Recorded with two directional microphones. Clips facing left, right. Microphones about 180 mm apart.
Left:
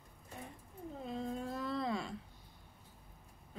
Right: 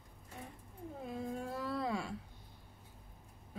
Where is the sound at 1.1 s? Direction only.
10° right (ahead or behind).